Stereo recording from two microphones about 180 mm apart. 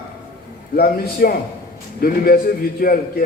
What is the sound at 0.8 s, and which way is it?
A man's voice, 55° left (ahead or behind).